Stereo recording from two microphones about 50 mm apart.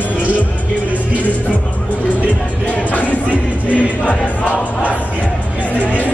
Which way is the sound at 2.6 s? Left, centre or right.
Left.